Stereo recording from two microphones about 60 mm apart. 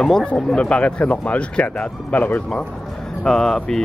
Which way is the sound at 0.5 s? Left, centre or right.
Centre.